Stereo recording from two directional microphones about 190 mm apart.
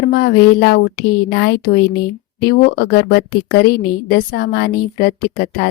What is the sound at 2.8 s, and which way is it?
A woman's voice, 55° left (ahead or behind).